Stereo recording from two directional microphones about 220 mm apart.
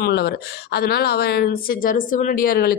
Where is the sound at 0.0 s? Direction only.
45° left (ahead or behind).